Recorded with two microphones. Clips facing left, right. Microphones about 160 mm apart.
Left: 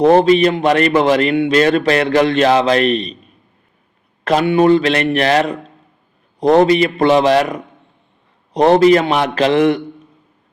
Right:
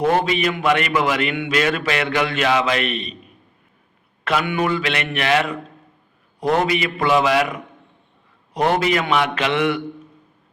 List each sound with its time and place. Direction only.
0.0 s a man's voice: 35° left (ahead or behind)
4.2 s a man's voice: 35° left (ahead or behind)